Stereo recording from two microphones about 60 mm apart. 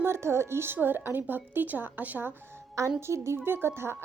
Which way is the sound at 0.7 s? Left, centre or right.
Right.